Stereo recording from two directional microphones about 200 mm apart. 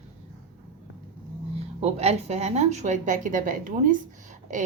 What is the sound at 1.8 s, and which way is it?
Speech, 30° right (ahead or behind).